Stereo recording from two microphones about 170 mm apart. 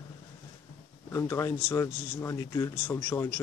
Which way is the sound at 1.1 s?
15° left (ahead or behind).